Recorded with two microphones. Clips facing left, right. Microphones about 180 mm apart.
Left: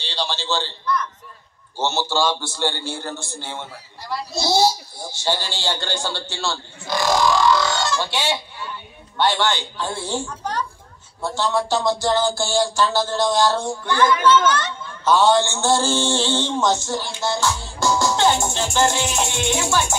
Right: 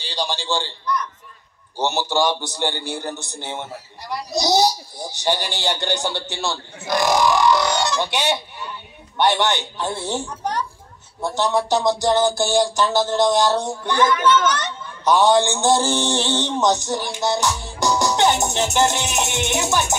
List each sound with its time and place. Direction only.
0.0 s a sound: 15° right (ahead or behind)
1.8 s a man's voice: 15° right (ahead or behind)
4.1 s music: 15° right (ahead or behind)